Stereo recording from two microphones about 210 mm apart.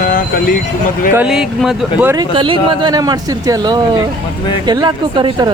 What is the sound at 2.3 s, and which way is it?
Speech, 25° right (ahead or behind).